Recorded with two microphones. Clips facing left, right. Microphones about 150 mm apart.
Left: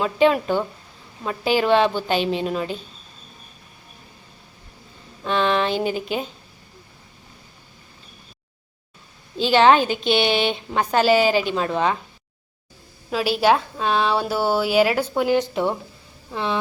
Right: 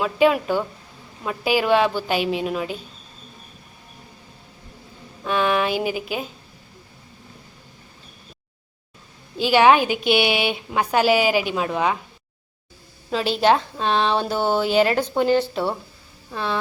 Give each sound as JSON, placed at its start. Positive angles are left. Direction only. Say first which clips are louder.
{"t": 0.0, "sound": "a woman's voice", "louder": "even", "side_deg": -5}
{"t": 5.2, "sound": "speech", "louder": "even", "side_deg": -10}
{"t": 9.4, "sound": "a woman's voice", "louder": "even", "side_deg": -10}
{"t": 13.1, "sound": "a woman's voice", "louder": "even", "side_deg": 5}
{"t": 15.4, "sound": "a woman's voice", "louder": "left 1 dB", "side_deg": 15}